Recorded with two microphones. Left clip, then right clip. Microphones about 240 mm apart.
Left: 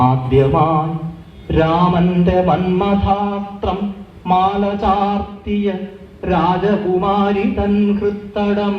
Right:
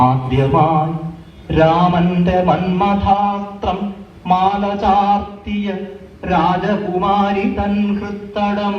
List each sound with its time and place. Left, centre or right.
0.0 s mantra: right
6.2 s speech: right
8.3 s a sound: right